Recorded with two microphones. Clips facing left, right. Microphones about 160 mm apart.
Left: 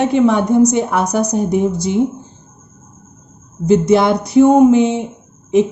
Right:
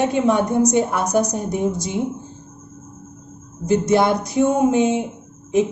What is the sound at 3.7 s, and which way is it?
A woman's voice, 75° left (ahead or behind).